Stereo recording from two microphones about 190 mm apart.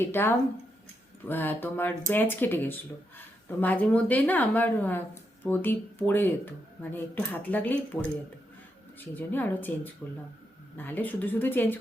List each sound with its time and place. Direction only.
0.0 s speech: 10° left (ahead or behind)
9.0 s speech: 10° left (ahead or behind)